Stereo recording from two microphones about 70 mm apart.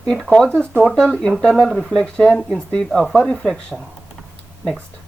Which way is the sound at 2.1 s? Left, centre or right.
Centre.